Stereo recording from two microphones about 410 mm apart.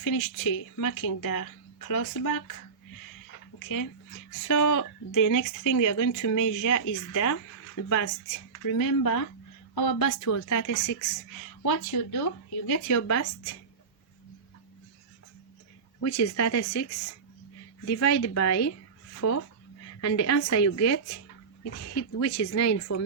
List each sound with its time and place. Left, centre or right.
0.0 s speech: left
4.4 s a woman's voice: left
11.6 s speech: left
13.0 s a woman's voice: left
16.0 s a woman's voice: left
17.8 s a woman's voice: left